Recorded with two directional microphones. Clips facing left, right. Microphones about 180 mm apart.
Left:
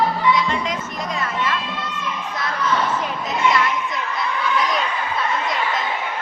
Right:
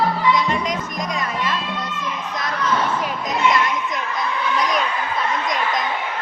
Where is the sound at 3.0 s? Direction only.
15° right (ahead or behind).